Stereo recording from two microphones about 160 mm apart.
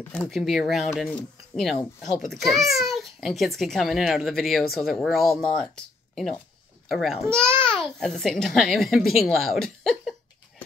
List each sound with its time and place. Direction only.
0.1 s a child's voice: centre (ahead or behind)